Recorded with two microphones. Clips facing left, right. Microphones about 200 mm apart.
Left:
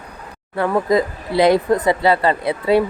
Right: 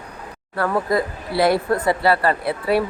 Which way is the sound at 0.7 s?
20° left (ahead or behind).